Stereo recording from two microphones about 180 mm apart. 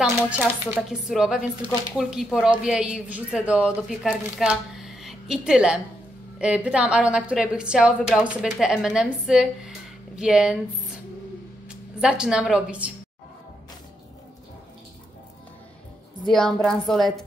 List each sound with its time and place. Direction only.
0.7 s a woman's voice: 5° right (ahead or behind)
1.6 s speech: 25° right (ahead or behind)
2.0 s a woman's voice: 5° right (ahead or behind)
12.0 s a woman's voice: 5° right (ahead or behind)
16.3 s a woman's voice: 5° left (ahead or behind)